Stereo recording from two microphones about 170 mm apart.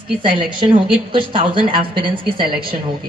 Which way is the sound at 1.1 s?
30° right (ahead or behind).